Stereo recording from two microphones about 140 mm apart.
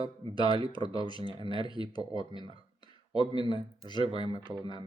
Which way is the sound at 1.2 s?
40° right (ahead or behind).